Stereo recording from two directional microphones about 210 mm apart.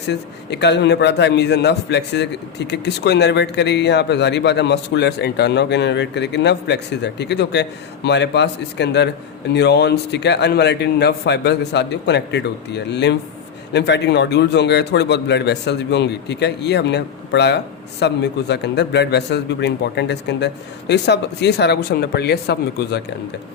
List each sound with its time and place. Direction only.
0.1 s a man's voice: 55° left (ahead or behind)